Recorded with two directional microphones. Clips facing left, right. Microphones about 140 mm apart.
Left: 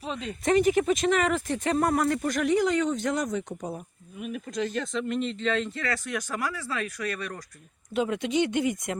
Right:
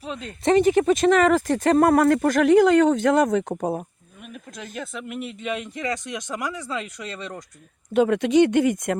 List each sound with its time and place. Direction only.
0.0 s speech: centre (ahead or behind)
0.4 s speech: 30° right (ahead or behind)
1.7 s speech: 55° right (ahead or behind)
4.2 s speech: centre (ahead or behind); by 7.3 s 20° right (ahead or behind)
7.9 s speech: 55° right (ahead or behind)